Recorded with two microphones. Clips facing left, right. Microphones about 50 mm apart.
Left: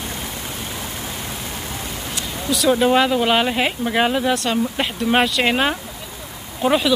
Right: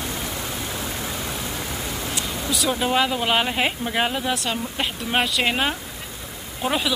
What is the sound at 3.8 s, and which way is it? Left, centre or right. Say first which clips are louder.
Speech: left 5 dB; centre.